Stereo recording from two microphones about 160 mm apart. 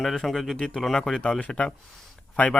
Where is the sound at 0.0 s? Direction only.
Centre (ahead or behind).